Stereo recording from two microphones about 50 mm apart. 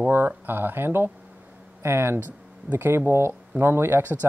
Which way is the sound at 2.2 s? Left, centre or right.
Right.